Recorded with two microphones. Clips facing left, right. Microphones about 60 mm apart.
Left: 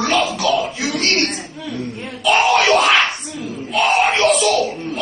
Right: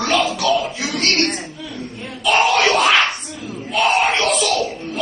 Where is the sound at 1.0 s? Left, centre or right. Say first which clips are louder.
Even; left.